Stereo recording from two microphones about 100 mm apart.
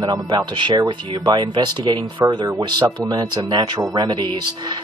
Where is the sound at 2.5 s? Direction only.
45° right (ahead or behind).